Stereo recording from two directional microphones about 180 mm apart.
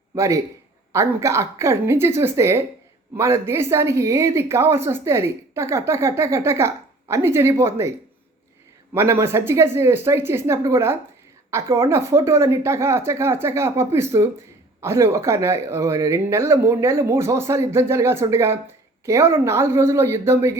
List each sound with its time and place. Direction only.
0.1 s a man's voice: 20° right (ahead or behind)
8.9 s a woman's voice: 15° right (ahead or behind)